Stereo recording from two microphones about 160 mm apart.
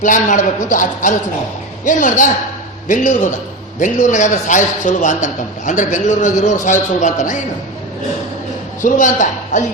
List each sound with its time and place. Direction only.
0.0 s a man's voice: 50° left (ahead or behind)
8.8 s a man's voice: 55° left (ahead or behind)